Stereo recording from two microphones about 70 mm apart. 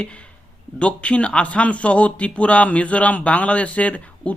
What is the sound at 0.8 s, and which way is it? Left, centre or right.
Speech, centre.